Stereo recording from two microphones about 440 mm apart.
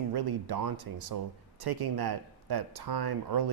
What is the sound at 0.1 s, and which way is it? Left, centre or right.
Speech, right.